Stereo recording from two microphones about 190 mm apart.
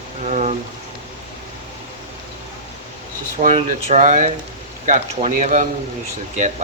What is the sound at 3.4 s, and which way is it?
Speech, 35° right (ahead or behind).